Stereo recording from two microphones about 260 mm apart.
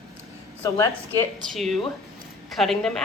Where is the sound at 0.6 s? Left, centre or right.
Centre.